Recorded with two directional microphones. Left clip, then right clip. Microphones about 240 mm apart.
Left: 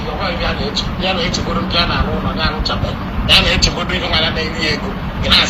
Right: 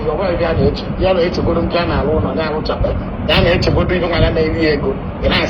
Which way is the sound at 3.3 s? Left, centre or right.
Right.